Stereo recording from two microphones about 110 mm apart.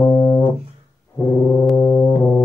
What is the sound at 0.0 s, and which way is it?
Music, 25° left (ahead or behind).